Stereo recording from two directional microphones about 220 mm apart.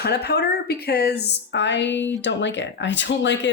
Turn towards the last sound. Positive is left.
turn(degrees=55)  # may be behind; listen again after turning